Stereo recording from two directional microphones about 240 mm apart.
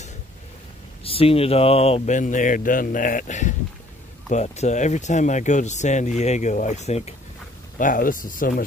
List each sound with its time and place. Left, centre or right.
1.0 s speech: left